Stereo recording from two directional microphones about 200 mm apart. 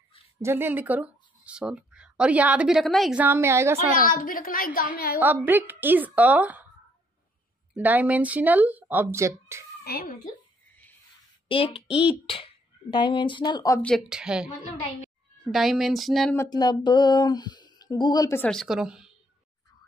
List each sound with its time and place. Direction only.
0.4 s speech: 10° right (ahead or behind)
4.0 s a woman's voice: 45° left (ahead or behind)
5.2 s speech: 10° right (ahead or behind)
7.7 s speech: 10° right (ahead or behind)
9.8 s speech: 50° left (ahead or behind)
11.4 s a child's voice: 25° left (ahead or behind)
11.9 s speech: 5° right (ahead or behind)
12.3 s speech: 25° left (ahead or behind)
13.8 s speech: centre (ahead or behind)
15.5 s speech: centre (ahead or behind)
16.3 s speech: 20° left (ahead or behind); by 19.1 s 5° right (ahead or behind)